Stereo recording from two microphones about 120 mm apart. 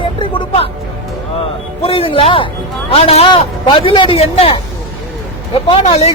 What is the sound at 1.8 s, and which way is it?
Speech, 50° left (ahead or behind).